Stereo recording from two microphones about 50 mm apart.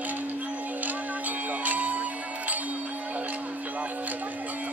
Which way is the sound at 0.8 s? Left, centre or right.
Right.